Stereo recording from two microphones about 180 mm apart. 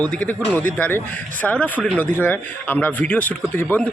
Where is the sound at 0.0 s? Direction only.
10° left (ahead or behind).